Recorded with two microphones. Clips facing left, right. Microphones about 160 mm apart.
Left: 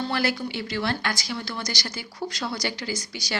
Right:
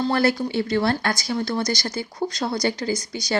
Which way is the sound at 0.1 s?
45° right (ahead or behind).